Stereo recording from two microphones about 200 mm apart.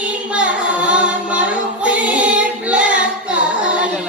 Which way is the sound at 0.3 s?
5° right (ahead or behind).